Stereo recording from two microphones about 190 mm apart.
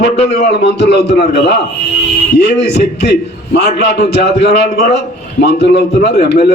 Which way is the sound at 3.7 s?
65° left (ahead or behind).